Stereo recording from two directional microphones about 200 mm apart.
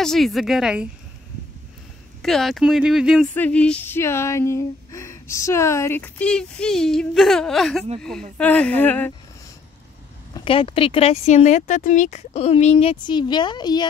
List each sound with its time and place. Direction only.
0.0 s speech: centre (ahead or behind)
2.2 s speech: centre (ahead or behind)
10.3 s speech: 25° left (ahead or behind)